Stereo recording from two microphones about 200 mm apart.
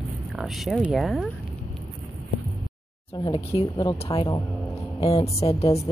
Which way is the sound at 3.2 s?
25° left (ahead or behind).